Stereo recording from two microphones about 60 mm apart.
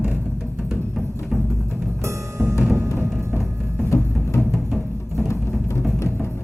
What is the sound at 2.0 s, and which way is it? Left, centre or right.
Music, right.